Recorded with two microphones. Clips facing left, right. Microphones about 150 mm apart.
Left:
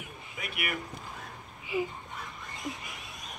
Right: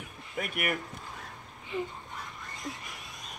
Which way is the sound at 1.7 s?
5° left (ahead or behind).